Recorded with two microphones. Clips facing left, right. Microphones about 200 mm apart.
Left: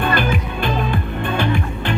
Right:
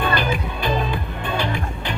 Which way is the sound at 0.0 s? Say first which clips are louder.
Left 2 dB; 50° left (ahead or behind).